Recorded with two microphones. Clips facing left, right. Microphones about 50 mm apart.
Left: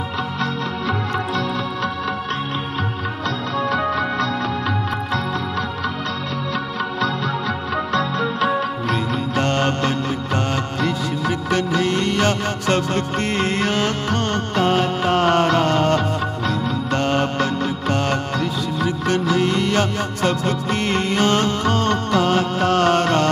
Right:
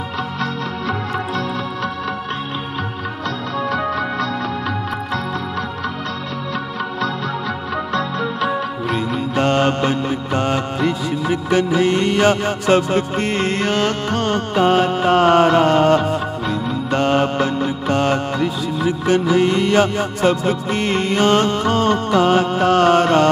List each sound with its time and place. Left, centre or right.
0.4 s music: right
3.5 s music: centre
8.4 s music: centre